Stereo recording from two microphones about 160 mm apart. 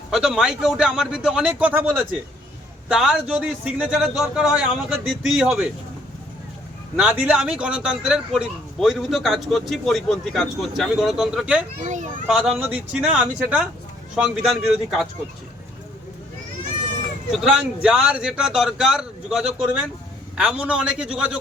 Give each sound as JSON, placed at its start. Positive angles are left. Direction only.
{"t": 0.1, "sound": "a man's voice", "side_deg": -5}
{"t": 6.9, "sound": "a man's voice", "side_deg": -10}
{"t": 11.8, "sound": "a child's voice", "side_deg": -50}
{"t": 12.3, "sound": "a man's voice", "side_deg": -5}
{"t": 17.4, "sound": "a man's voice", "side_deg": -5}